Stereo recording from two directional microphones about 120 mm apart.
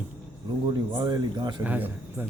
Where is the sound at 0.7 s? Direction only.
35° right (ahead or behind).